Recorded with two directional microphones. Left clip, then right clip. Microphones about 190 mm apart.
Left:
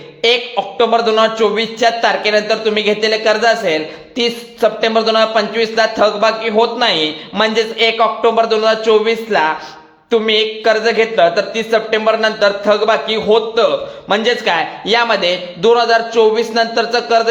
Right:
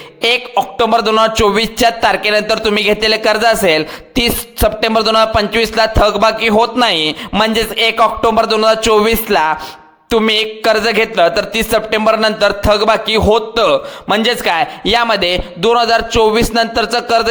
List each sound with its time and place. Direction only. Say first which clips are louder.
0.2 s a man's voice: right 1 dB; 50° right (ahead or behind)